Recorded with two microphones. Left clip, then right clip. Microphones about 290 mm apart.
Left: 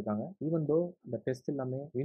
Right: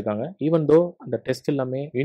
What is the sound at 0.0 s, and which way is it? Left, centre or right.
Speech, right.